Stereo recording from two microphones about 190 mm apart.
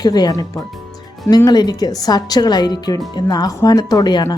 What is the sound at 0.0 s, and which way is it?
Speech, 20° left (ahead or behind).